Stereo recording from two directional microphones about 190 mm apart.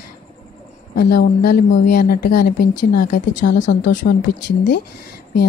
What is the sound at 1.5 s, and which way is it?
Speech, 50° left (ahead or behind).